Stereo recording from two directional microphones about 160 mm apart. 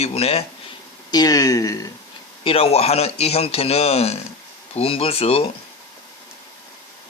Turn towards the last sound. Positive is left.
turn(degrees=35)  # may be behind; listen again after turning